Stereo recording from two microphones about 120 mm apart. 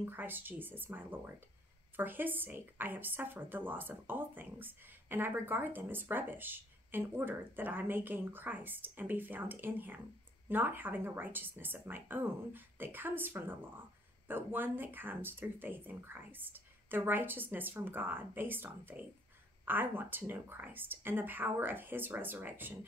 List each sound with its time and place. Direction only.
0.0 s speech: 15° right (ahead or behind)